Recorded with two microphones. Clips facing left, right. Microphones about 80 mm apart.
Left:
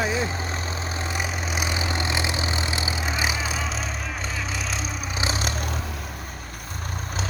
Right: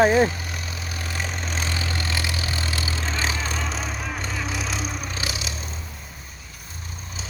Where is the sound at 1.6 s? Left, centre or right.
Centre.